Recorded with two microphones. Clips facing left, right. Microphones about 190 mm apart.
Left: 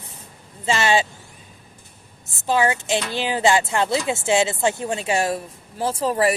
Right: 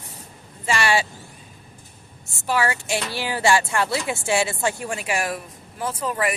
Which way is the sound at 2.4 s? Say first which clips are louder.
Left 3 dB; 20° left (ahead or behind).